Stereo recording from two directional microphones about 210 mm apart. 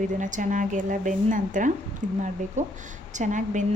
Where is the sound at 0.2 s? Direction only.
35° right (ahead or behind).